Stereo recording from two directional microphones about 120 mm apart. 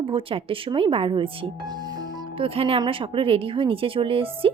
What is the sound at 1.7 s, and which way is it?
Music, 35° right (ahead or behind).